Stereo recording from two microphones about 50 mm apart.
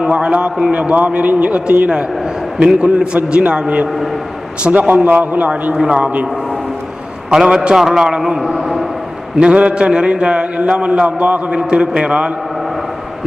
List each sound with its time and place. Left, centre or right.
0.0 s a man's voice: right
5.7 s a man's voice: centre
7.3 s a man's voice: centre
8.4 s a man's voice: centre
9.4 s a man's voice: right